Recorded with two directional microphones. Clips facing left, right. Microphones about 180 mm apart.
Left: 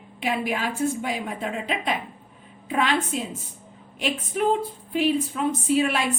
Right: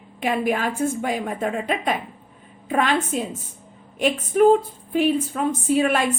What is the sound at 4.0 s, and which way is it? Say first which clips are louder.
A woman's voice: right 8 dB; 45° right (ahead or behind).